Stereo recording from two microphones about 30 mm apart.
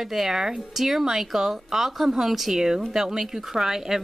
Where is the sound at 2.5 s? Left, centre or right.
Centre.